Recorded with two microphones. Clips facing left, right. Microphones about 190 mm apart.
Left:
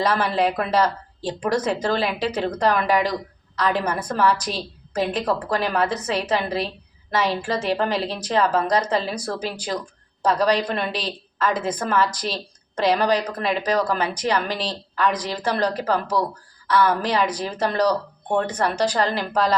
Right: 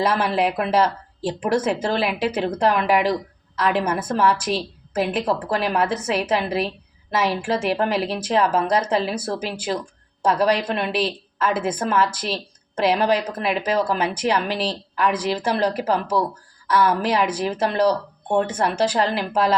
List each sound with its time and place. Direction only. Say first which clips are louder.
0.0 s a woman's voice: even; 5° right (ahead or behind)